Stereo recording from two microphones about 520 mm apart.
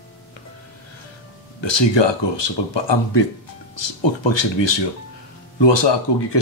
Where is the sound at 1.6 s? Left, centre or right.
Left.